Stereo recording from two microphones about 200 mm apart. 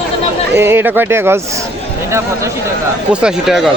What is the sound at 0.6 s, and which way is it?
Speech, 10° right (ahead or behind).